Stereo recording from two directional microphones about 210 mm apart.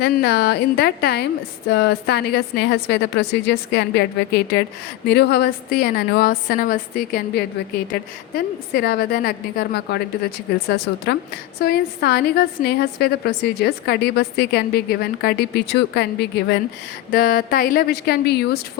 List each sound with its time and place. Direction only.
0.0 s a woman's voice: 50° left (ahead or behind)